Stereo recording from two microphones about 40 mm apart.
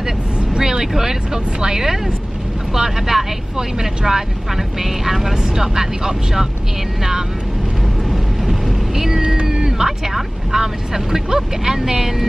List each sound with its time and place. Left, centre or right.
0.6 s speech: centre
8.1 s cat: centre
9.7 s speech: centre